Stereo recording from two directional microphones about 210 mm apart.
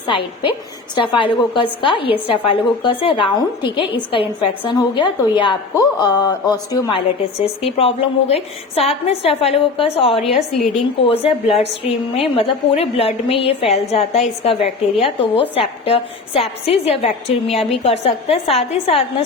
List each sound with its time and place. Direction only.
0.1 s a woman's voice: 25° left (ahead or behind)
7.4 s a woman's voice: 30° left (ahead or behind)